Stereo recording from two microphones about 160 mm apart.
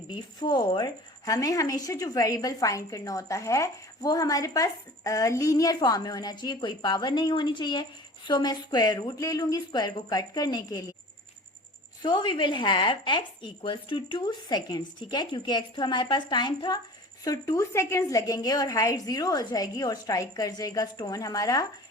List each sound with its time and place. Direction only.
0.3 s a woman's voice: 25° left (ahead or behind)
12.0 s a woman's voice: 30° left (ahead or behind)